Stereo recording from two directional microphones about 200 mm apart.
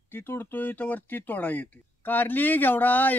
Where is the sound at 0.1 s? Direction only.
10° left (ahead or behind).